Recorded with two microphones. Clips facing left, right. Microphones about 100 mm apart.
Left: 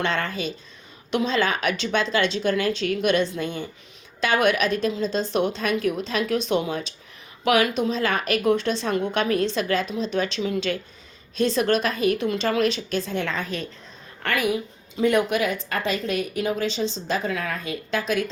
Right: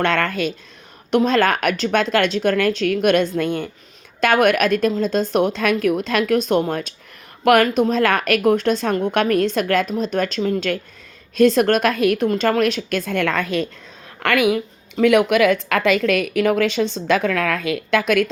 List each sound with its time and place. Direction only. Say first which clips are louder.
0.0 s a woman's voice: right 6 dB; 60° right (ahead or behind)
14.2 s a woman's voice: right 6 dB; 85° right; by 18.3 s 65° right (ahead or behind)